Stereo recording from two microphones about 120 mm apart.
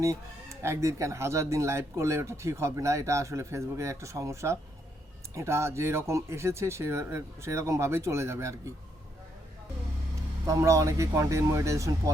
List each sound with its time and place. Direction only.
0.6 s speech: 25° right (ahead or behind)
10.4 s speech: 25° right (ahead or behind)